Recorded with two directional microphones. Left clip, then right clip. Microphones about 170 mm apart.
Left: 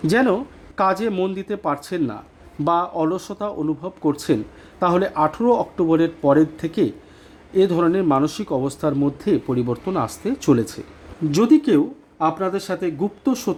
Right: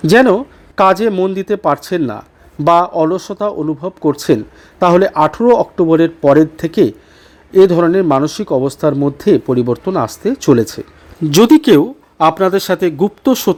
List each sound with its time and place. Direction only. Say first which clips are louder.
0.0 s speech: right 9 dB; 35° right (ahead or behind)
11.3 s speech: right 8 dB; 45° right (ahead or behind)